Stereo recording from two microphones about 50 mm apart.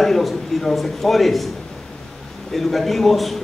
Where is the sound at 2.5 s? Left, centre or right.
Centre.